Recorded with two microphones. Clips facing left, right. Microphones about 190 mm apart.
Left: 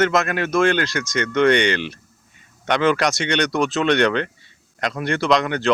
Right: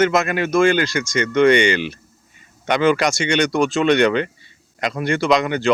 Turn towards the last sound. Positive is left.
turn(degrees=0)  # may be behind; listen again after turning